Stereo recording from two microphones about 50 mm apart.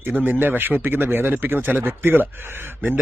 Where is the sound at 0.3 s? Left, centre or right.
Right.